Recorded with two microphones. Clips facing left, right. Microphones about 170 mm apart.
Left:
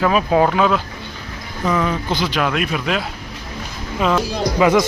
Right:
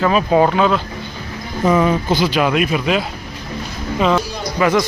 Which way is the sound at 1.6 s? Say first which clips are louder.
Right 5 dB; 20° right (ahead or behind).